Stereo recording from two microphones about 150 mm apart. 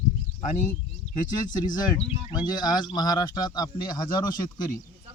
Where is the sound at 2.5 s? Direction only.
30° left (ahead or behind).